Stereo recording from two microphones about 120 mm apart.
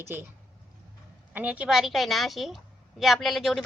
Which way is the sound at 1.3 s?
10° right (ahead or behind).